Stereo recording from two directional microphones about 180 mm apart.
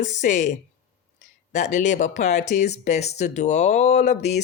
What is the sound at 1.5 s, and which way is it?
Speech, 40° left (ahead or behind).